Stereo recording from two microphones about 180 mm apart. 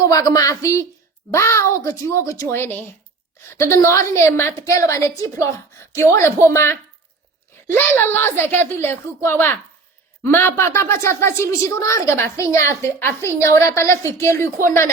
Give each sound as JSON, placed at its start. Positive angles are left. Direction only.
{"t": 0.0, "sound": "a woman's voice", "side_deg": 20}
{"t": 7.8, "sound": "a woman's voice", "side_deg": 10}